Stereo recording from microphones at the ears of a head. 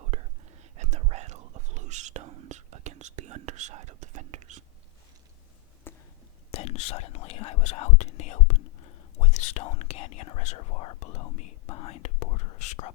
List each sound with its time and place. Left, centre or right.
0.8 s whispering: right
6.5 s whispering: left